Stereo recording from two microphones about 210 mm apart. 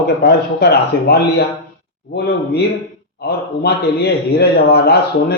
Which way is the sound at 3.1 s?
50° left (ahead or behind).